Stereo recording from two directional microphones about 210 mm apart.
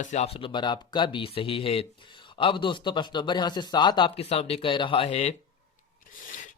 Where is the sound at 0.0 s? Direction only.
35° left (ahead or behind).